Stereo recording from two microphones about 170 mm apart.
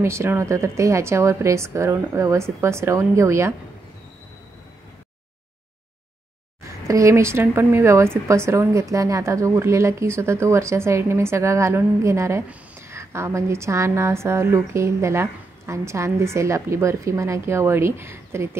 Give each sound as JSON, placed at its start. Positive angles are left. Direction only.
{"t": 0.0, "sound": "a woman's voice", "side_deg": -15}
{"t": 6.9, "sound": "a woman's voice", "side_deg": -15}